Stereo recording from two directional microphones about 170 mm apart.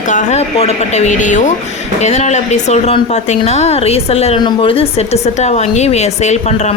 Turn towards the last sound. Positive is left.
turn(degrees=40)  # may be behind; listen again after turning